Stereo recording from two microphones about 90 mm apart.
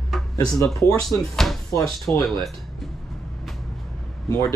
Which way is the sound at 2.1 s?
20° left (ahead or behind).